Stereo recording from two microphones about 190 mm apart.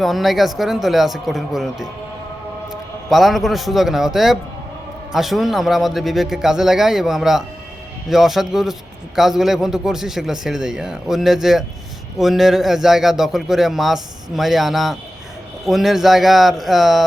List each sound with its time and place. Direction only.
0.0 s a man's voice: centre (ahead or behind)
3.1 s a man's voice: centre (ahead or behind)